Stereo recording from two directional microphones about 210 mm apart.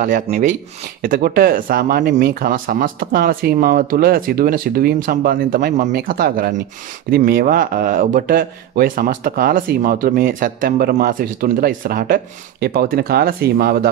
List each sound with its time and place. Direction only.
0.0 s speech: 40° right (ahead or behind)
2.0 s speech: 55° right (ahead or behind)